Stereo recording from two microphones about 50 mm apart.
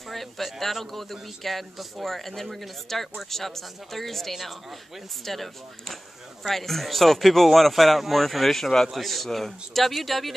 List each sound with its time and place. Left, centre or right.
0.1 s a man's voice: centre